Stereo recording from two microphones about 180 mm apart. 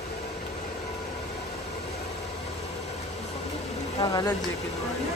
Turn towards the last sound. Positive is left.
turn(degrees=25)  # may be behind; listen again after turning